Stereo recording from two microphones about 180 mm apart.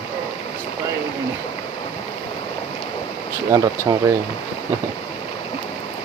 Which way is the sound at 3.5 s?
15° right (ahead or behind).